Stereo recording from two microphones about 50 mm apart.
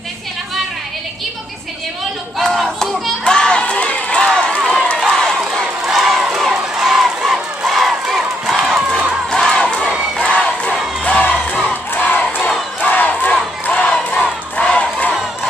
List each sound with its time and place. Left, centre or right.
2.3 s crowd: centre
5.0 s run: centre
5.4 s crowd: centre
8.5 s crowd: right
9.3 s crowd: centre
11.1 s music: left
12.0 s crowd: left